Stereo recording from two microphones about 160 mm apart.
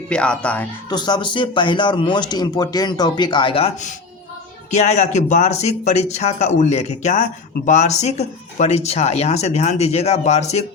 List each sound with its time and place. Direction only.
0.1 s speech: 5° left (ahead or behind)
0.9 s speech: 25° left (ahead or behind); by 10.7 s 45° left (ahead or behind)